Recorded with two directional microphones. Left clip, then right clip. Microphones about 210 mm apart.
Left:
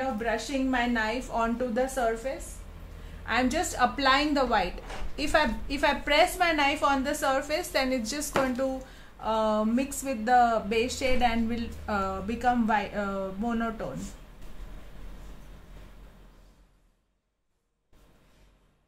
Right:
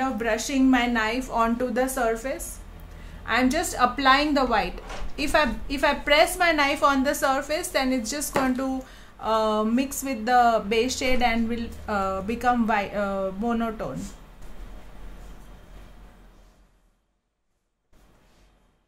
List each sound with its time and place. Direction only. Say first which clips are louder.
0.2 s a woman's voice: right 5 dB; 30° right (ahead or behind)
3.3 s speech: right 4 dB; 15° right (ahead or behind)